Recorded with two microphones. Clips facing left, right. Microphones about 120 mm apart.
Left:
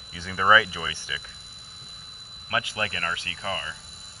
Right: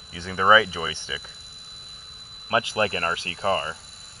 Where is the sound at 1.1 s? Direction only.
Centre (ahead or behind).